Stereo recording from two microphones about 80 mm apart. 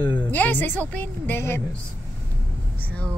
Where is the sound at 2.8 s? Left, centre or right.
Centre.